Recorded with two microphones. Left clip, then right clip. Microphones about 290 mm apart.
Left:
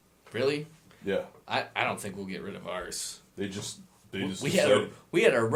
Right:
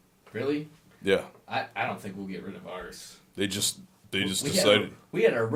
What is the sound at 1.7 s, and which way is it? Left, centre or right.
Speech, left.